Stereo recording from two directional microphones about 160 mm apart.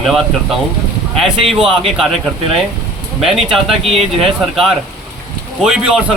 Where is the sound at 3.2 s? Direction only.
Centre (ahead or behind).